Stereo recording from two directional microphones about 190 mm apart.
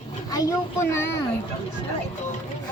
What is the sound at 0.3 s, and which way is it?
Speech, 15° left (ahead or behind).